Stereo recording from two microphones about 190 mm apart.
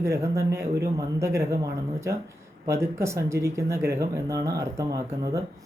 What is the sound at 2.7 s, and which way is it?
A man's voice, 15° right (ahead or behind).